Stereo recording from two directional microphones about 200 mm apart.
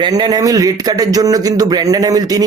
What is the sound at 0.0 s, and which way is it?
Speech, 20° right (ahead or behind).